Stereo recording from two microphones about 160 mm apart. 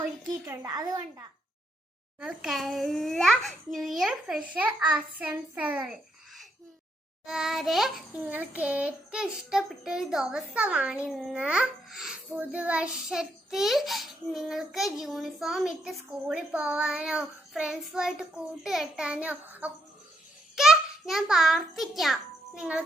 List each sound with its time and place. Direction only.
0.6 s a child's voice: 25° right (ahead or behind)
2.2 s child singing: 5° right (ahead or behind)
20.6 s a child's voice: centre (ahead or behind)